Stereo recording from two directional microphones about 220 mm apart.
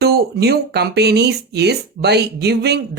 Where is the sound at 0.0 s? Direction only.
45° right (ahead or behind).